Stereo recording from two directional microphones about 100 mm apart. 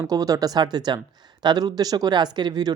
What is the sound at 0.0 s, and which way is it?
Speech, 35° right (ahead or behind).